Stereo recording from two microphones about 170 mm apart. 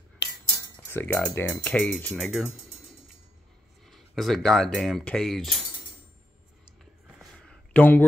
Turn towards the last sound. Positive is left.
turn(degrees=10)  # may be behind; listen again after turning